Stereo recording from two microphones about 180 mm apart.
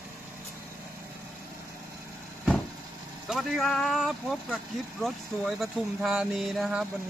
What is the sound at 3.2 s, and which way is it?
Speech, centre (ahead or behind).